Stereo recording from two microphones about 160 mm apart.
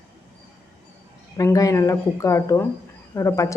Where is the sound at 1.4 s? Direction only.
20° left (ahead or behind).